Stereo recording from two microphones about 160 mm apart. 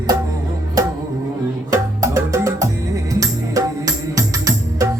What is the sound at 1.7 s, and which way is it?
Music, 20° right (ahead or behind).